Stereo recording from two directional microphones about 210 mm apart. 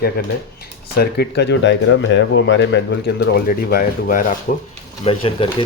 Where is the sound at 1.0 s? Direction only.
50° left (ahead or behind).